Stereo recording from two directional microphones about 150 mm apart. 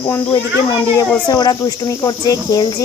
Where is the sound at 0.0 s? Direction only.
15° left (ahead or behind).